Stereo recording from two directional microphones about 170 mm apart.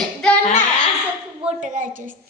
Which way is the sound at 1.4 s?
50° right (ahead or behind).